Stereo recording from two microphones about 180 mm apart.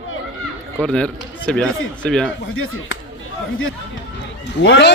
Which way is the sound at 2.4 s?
90° left.